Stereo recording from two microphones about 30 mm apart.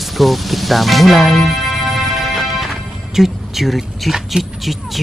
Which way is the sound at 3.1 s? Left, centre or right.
Centre.